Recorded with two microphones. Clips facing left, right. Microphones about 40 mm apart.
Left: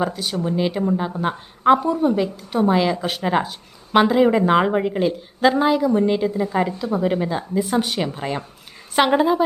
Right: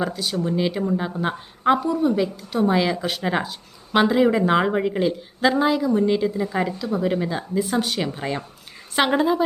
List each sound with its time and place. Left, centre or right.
0.0 s a woman's voice: centre
1.8 s a woman's voice: centre
6.7 s speech: left
7.0 s a woman's voice: centre